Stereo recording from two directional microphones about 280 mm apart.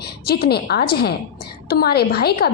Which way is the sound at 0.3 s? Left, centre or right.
Left.